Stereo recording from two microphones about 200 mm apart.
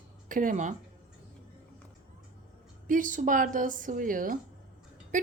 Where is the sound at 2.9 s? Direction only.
40° right (ahead or behind).